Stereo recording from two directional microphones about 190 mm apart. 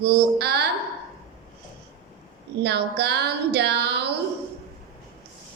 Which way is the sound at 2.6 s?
60° right (ahead or behind).